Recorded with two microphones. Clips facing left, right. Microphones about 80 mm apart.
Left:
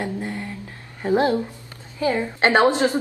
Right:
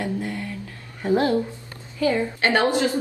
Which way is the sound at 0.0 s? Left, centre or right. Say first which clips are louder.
Even; left.